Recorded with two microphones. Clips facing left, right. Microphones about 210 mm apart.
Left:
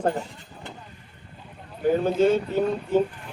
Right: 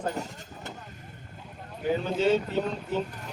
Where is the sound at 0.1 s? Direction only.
40° right (ahead or behind).